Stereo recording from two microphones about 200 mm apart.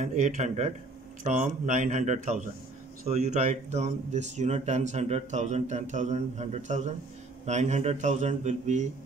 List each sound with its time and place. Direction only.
0.0 s speech: 35° right (ahead or behind)